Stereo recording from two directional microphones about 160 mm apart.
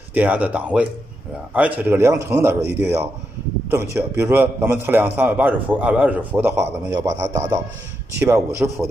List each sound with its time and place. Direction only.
0.1 s a man's voice: 10° right (ahead or behind)